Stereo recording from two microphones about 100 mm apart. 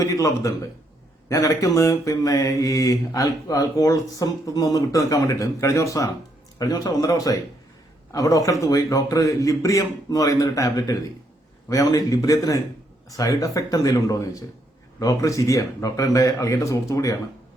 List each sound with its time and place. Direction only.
0.0 s a man's voice: 35° left (ahead or behind)
1.3 s mantra: 30° left (ahead or behind)